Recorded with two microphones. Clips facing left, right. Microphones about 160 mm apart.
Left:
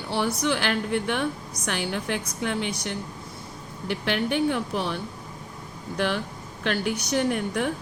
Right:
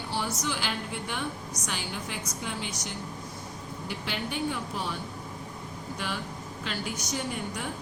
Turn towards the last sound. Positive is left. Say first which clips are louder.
# left 9 dB
turn(degrees=65)  # may be behind; listen again after turning